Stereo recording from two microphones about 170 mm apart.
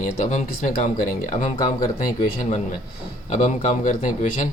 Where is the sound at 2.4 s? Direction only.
40° left (ahead or behind).